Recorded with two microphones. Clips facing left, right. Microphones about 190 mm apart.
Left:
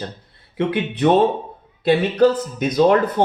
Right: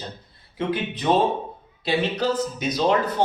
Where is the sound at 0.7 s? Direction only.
60° left (ahead or behind).